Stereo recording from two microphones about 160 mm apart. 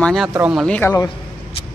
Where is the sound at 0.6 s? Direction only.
10° left (ahead or behind).